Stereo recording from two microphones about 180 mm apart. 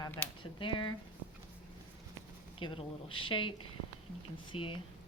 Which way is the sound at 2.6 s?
30° left (ahead or behind).